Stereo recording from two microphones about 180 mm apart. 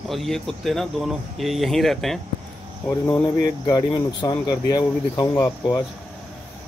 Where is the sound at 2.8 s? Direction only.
15° left (ahead or behind).